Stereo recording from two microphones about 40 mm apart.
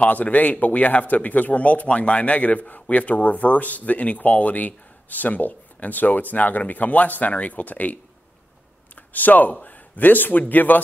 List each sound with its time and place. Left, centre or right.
0.0 s speech: left